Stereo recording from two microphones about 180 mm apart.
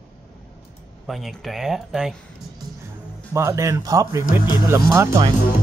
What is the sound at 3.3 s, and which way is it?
Speech, 15° right (ahead or behind).